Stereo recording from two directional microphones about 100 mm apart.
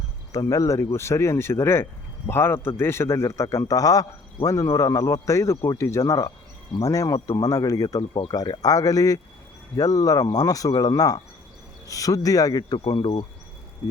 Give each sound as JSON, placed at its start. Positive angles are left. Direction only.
{"t": 0.3, "sound": "a man's voice", "side_deg": 35}
{"t": 12.9, "sound": "speech", "side_deg": 55}